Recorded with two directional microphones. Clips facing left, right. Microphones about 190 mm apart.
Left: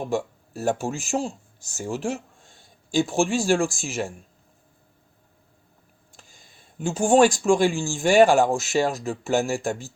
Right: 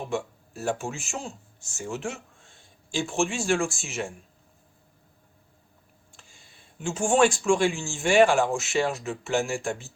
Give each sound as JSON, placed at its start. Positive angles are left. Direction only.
{"t": 0.1, "sound": "speech", "side_deg": 35}
{"t": 6.1, "sound": "speech", "side_deg": 40}